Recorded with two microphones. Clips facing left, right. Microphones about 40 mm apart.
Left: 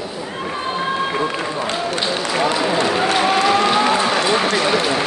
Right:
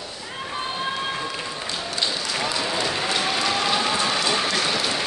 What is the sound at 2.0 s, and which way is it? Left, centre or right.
Speech, left.